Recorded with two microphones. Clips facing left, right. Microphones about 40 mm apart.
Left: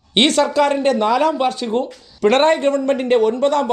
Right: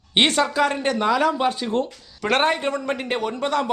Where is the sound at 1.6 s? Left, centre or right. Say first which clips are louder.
Left 3 dB; centre.